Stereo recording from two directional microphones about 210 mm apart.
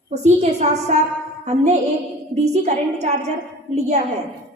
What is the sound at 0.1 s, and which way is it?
A woman's voice, 35° right (ahead or behind).